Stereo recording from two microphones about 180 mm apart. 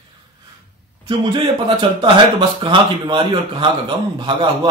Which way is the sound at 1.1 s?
30° right (ahead or behind).